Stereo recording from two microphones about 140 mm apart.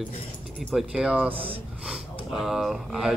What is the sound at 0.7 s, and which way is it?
Speech, 5° right (ahead or behind).